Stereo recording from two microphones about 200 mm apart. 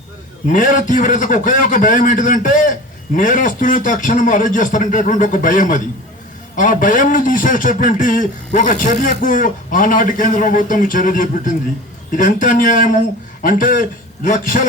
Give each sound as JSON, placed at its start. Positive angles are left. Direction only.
{"t": 0.4, "sound": "a man's voice", "side_deg": 40}